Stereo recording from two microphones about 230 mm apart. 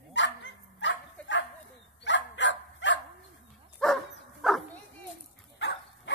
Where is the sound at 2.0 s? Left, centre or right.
Left.